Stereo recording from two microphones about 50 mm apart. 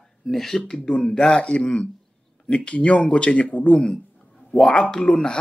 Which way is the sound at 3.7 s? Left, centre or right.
Centre.